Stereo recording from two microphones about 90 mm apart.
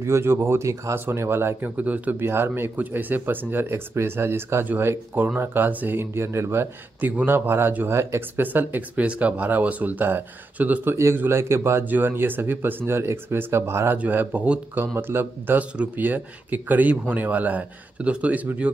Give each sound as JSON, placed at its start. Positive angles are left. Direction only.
{"t": 0.0, "sound": "speech", "side_deg": -30}